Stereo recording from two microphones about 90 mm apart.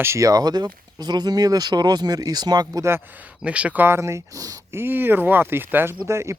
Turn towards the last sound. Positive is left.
turn(degrees=-30)  # may be behind; listen again after turning